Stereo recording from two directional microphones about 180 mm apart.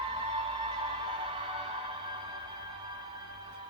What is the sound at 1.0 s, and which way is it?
Music, 30° right (ahead or behind).